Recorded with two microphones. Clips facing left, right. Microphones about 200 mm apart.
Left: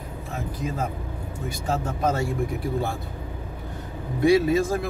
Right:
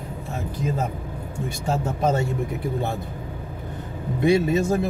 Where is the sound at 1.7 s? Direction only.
25° right (ahead or behind).